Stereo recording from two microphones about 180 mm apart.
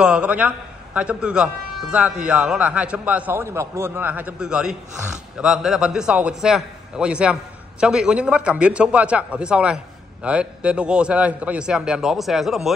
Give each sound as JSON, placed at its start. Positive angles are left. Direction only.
{"t": 0.0, "sound": "a man's voice", "side_deg": -5}